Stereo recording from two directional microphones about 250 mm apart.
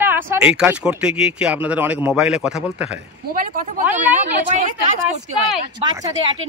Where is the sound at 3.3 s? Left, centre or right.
Right.